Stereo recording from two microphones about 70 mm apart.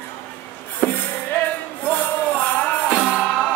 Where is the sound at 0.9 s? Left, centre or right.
Left.